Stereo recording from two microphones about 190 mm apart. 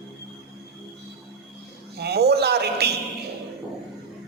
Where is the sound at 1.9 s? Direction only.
60° right (ahead or behind).